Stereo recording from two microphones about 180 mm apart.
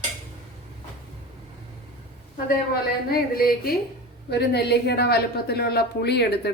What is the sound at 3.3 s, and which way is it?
Speech, 55° left (ahead or behind).